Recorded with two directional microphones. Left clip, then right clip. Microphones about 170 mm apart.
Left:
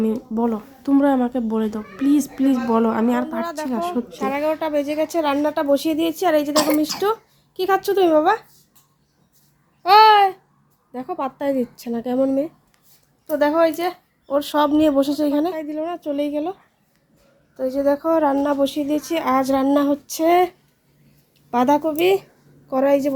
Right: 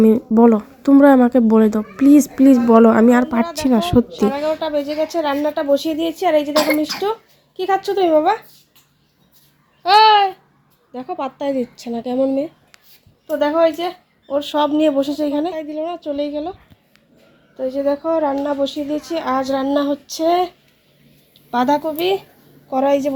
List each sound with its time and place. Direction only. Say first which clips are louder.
0.0 s speech: right 10 dB; 30° right (ahead or behind)
3.5 s speech: right 7 dB; 40° right (ahead or behind)
4.3 s a woman's voice: right 2 dB; 5° left (ahead or behind)
6.5 s a woman's voice: right 2 dB; 15° left (ahead or behind)
7.0 s speech: even; centre (ahead or behind)
9.8 s a woman's voice: right 1 dB; 5° left (ahead or behind)
17.6 s a woman's voice: even; centre (ahead or behind)
21.5 s a woman's voice: right 1 dB; 10° left (ahead or behind)